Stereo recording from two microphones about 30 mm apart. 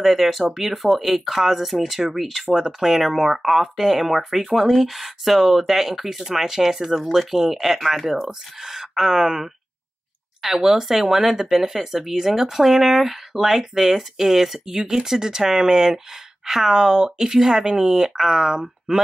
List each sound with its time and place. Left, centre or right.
0.0 s speech: centre
2.5 s speech: centre
8.3 s speech: centre
10.5 s speech: centre